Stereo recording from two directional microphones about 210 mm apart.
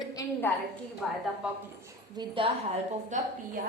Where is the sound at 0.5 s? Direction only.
10° left (ahead or behind).